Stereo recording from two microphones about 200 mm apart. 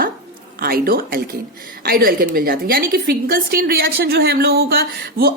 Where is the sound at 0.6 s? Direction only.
50° right (ahead or behind).